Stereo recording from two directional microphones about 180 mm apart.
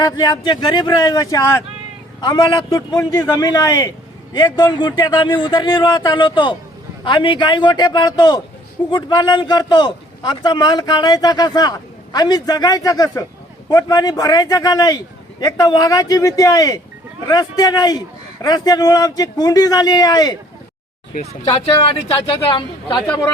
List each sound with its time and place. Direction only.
0.0 s speech: 20° left (ahead or behind)
22.1 s speech: 25° left (ahead or behind)